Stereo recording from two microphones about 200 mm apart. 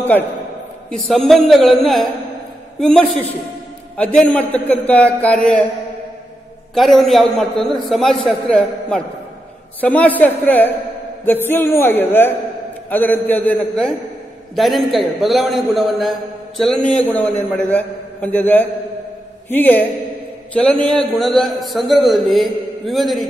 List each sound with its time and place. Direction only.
0.8 s a man's voice: centre (ahead or behind)
6.7 s a man's voice: centre (ahead or behind)
20.8 s a man's voice: centre (ahead or behind)